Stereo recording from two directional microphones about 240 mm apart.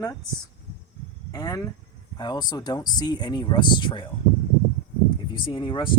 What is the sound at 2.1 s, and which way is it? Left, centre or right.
Speech, centre.